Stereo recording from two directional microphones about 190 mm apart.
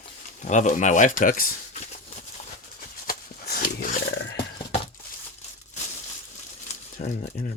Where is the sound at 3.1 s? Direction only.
50° left (ahead or behind).